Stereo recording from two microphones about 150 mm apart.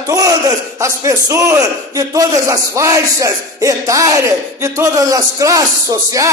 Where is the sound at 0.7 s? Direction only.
20° right (ahead or behind).